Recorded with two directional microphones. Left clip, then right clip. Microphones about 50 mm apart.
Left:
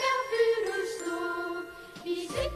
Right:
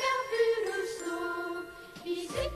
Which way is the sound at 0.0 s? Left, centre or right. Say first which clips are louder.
Left 2 dB; left.